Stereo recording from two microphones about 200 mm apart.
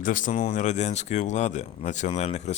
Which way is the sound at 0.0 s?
40° left (ahead or behind).